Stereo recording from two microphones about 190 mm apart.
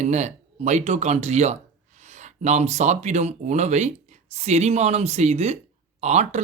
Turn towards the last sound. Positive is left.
turn(degrees=-35)  # may be behind; listen again after turning